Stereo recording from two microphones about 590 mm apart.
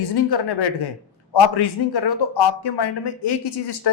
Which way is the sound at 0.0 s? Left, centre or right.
Left.